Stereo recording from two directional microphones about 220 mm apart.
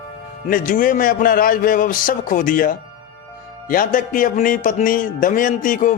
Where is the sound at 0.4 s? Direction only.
35° left (ahead or behind).